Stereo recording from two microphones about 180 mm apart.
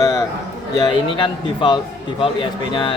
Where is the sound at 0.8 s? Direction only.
30° left (ahead or behind).